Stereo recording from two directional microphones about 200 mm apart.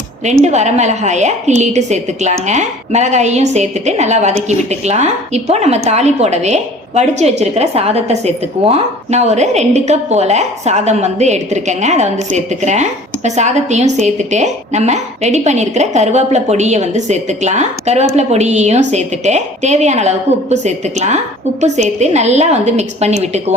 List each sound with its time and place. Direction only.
0.4 s a woman's voice: 35° right (ahead or behind)